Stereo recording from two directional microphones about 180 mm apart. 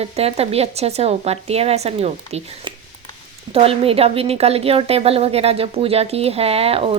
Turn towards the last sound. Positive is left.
turn(degrees=-30)  # may be behind; listen again after turning